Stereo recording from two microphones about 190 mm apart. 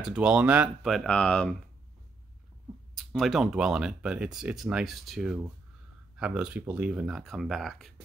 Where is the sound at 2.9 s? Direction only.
Centre (ahead or behind).